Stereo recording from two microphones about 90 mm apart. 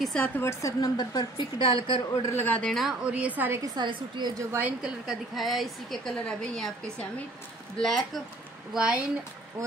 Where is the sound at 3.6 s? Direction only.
50° right (ahead or behind).